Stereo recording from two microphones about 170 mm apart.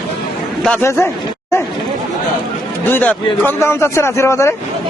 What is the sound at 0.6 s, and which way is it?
Speech, 10° left (ahead or behind).